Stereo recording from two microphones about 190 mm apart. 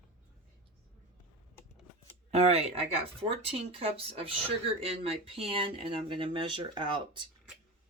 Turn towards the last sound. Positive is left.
turn(degrees=-25)  # may be behind; listen again after turning